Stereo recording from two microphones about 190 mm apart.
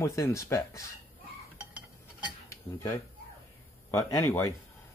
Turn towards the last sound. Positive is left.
turn(degrees=15)  # may be behind; listen again after turning